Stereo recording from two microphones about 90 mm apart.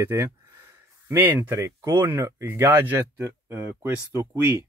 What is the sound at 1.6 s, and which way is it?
Speech, 35° right (ahead or behind).